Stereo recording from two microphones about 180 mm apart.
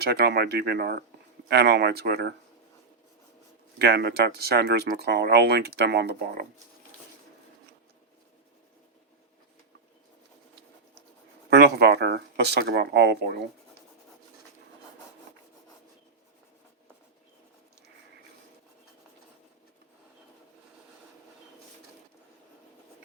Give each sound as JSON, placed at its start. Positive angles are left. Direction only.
{"t": 0.0, "sound": "speech", "side_deg": -65}
{"t": 3.8, "sound": "speech", "side_deg": -65}
{"t": 11.5, "sound": "speech", "side_deg": -60}